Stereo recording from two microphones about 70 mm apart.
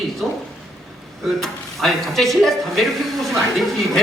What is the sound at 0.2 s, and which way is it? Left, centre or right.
Speech, centre.